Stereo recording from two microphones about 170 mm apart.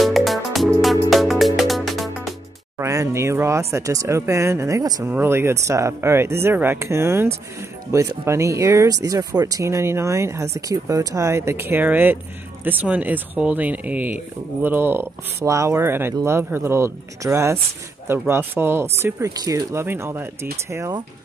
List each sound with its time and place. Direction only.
0.0 s music: centre (ahead or behind)
2.8 s speech: 15° right (ahead or behind)